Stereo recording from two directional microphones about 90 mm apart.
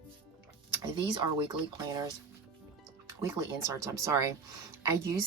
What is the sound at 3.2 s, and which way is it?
Speech, 40° right (ahead or behind).